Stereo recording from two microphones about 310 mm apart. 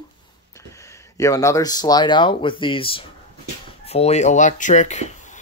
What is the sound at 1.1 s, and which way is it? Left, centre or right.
Speech, centre.